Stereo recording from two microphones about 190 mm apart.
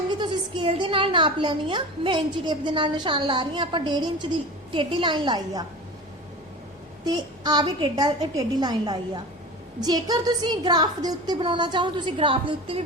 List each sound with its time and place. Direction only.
0.1 s a woman's voice: 25° right (ahead or behind)
7.0 s a woman's voice: 20° right (ahead or behind)